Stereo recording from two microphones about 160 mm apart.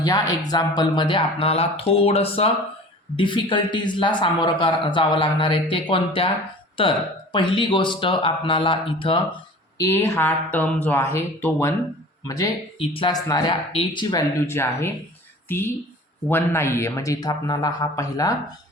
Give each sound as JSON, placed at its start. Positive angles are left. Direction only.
{"t": 0.0, "sound": "a man's voice", "side_deg": 25}
{"t": 9.7, "sound": "a man's voice", "side_deg": 20}
{"t": 12.8, "sound": "a man's voice", "side_deg": 35}